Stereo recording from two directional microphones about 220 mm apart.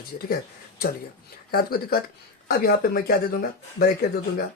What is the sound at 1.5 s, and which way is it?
Speech, 45° left (ahead or behind).